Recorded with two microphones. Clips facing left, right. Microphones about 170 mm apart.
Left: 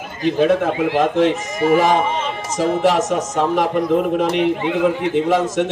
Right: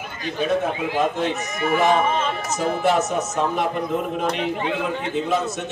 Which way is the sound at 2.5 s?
90° left.